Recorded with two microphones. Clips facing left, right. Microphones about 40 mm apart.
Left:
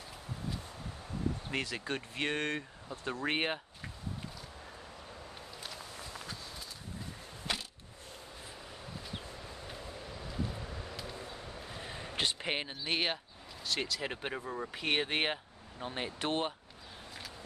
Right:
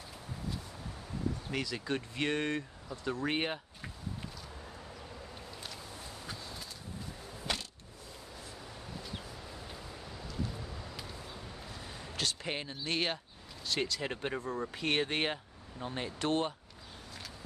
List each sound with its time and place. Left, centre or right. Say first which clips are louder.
1.9 s speech: right 2 dB; centre
2.9 s speech: even; left
7.5 s a sound: even; centre
11.7 s a sound: left 4 dB; left
12.8 s speech: even; centre
13.7 s speech: right 1 dB; centre